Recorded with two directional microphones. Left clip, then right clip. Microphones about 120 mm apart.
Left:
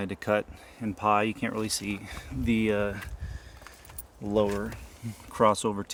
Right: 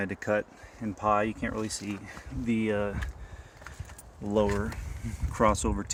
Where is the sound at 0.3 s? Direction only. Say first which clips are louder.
Left 1 dB; 80° left.